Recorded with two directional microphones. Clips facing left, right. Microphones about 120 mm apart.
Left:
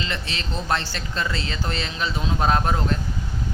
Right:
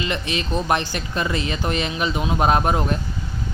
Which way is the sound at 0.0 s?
15° right (ahead or behind).